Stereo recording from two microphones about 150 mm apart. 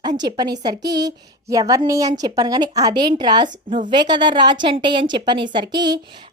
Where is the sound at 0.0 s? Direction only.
30° right (ahead or behind).